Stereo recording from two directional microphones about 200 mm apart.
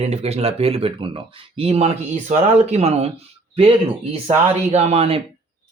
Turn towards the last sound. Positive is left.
turn(degrees=-30)  # may be behind; listen again after turning